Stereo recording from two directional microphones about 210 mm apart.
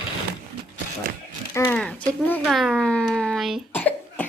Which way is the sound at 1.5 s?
15° left (ahead or behind).